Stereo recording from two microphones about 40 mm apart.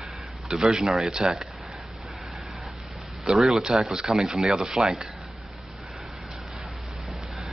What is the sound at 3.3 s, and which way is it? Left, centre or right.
Speech, centre.